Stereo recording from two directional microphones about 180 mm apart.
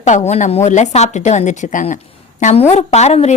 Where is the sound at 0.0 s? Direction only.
40° left (ahead or behind).